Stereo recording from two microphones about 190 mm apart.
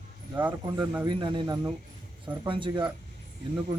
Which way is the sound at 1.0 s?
25° right (ahead or behind).